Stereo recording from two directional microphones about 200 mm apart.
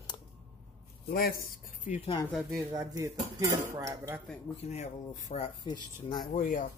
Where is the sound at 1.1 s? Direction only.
45° left (ahead or behind).